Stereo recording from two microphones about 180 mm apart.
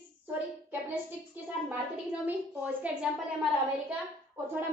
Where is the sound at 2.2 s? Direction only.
10° right (ahead or behind).